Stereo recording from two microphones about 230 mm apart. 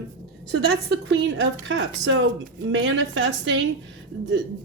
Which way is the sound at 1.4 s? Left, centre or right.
Right.